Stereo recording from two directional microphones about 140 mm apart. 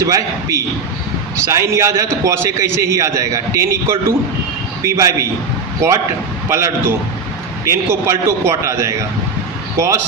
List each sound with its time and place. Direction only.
0.0 s a man's voice: 20° right (ahead or behind)